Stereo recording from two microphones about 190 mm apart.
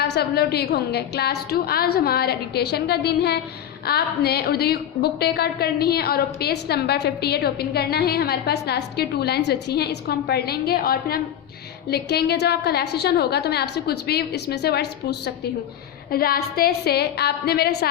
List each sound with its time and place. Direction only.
0.0 s a woman's voice: 60° left (ahead or behind)